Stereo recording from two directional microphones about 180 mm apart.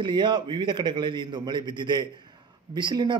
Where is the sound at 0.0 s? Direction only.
25° right (ahead or behind).